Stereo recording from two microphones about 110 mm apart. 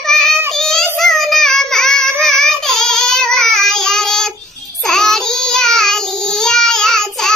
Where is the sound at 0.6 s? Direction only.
5° left (ahead or behind).